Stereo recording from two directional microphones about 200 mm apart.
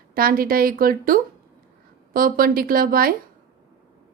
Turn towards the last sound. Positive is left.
turn(degrees=-45)  # may be behind; listen again after turning